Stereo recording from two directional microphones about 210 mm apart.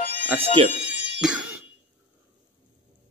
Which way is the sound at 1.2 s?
5° right (ahead or behind).